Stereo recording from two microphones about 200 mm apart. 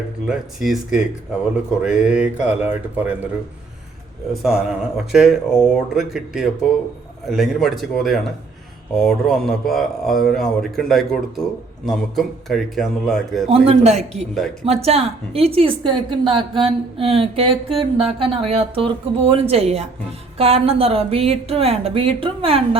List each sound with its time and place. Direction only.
0.3 s speech: 5° right (ahead or behind)
4.4 s speech: centre (ahead or behind)
13.5 s a woman's voice: 30° right (ahead or behind)